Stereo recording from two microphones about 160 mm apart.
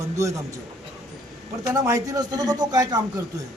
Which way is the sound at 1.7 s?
20° right (ahead or behind).